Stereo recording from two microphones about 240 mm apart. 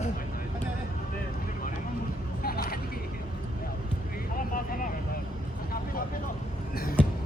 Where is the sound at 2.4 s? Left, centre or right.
Left.